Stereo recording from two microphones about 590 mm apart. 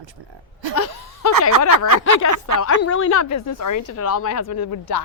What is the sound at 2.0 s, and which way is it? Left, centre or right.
Speech, left.